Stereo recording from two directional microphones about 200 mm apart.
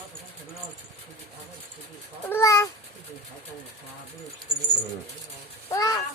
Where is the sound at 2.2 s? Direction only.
15° left (ahead or behind).